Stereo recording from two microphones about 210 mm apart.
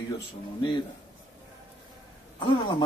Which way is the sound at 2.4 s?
25° left (ahead or behind).